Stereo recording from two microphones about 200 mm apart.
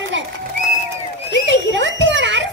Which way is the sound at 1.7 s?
65° right (ahead or behind).